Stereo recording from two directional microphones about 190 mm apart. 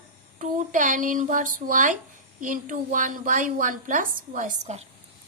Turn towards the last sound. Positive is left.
turn(degrees=-40)  # may be behind; listen again after turning